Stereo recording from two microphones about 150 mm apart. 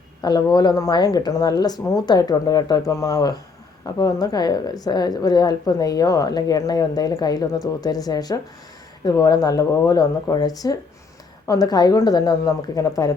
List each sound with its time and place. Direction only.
0.2 s a woman's voice: 30° left (ahead or behind)